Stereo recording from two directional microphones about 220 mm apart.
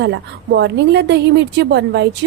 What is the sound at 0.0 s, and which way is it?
A woman's voice, 50° right (ahead or behind).